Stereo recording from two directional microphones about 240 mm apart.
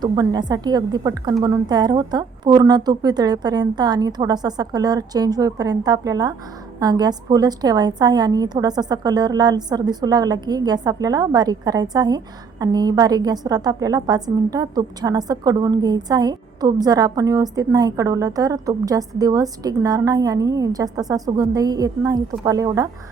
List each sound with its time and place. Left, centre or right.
0.0 s a woman's voice: centre